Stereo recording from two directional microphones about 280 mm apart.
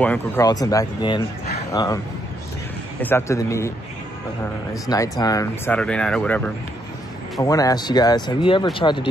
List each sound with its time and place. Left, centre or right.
0.0 s speech: centre
3.0 s speech: centre
4.8 s speech: centre